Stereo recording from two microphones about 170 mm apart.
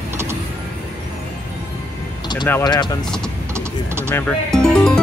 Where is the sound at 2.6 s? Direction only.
25° left (ahead or behind).